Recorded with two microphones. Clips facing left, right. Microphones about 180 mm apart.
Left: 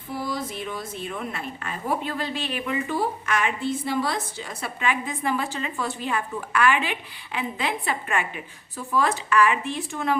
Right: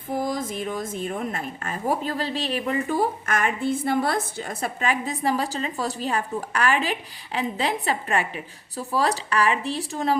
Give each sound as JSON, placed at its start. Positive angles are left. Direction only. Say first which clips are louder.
{"t": 0.1, "sound": "a woman's voice", "louder": "right 4 dB", "side_deg": -45}